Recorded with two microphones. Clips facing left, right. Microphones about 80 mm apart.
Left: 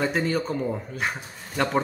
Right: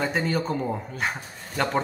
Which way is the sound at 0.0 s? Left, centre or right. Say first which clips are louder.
Left 1 dB; centre.